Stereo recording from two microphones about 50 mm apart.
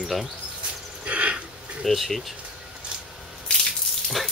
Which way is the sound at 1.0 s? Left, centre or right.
Right.